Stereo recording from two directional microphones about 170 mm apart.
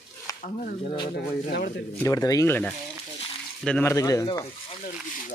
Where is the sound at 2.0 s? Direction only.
20° left (ahead or behind).